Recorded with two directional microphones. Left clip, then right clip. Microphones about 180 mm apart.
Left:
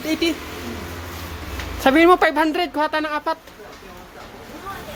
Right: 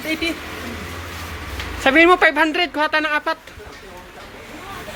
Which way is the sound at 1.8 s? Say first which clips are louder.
Right 1 dB; 20° left (ahead or behind).